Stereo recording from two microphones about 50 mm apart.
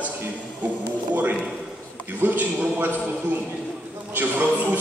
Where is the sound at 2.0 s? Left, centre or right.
Right.